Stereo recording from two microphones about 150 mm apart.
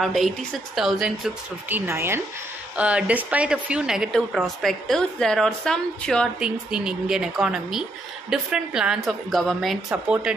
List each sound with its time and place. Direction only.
0.0 s a woman's voice: centre (ahead or behind)
1.7 s a woman's voice: 15° right (ahead or behind)